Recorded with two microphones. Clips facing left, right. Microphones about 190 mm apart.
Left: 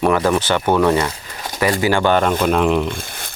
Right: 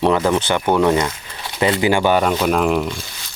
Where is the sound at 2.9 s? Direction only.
55° left (ahead or behind).